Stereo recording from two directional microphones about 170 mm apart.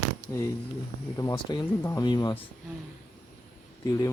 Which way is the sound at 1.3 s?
25° left (ahead or behind).